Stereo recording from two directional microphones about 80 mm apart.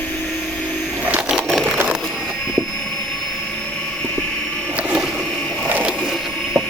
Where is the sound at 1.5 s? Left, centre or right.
Centre.